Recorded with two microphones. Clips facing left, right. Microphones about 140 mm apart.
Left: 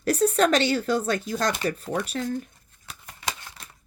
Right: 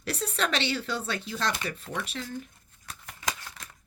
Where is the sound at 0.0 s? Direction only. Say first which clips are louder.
Left 10 dB; 45° left (ahead or behind).